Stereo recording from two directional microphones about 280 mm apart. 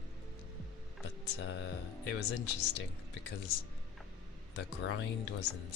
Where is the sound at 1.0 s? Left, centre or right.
Left.